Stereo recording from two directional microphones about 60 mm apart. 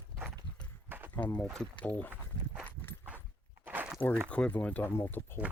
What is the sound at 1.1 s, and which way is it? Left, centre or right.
Speech, left.